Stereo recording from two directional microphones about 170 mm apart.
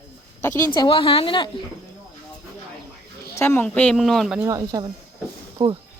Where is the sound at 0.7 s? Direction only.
30° left (ahead or behind).